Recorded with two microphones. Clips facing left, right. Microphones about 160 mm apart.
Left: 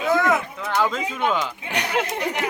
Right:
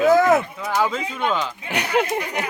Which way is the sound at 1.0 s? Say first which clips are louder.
Even; 10° left (ahead or behind).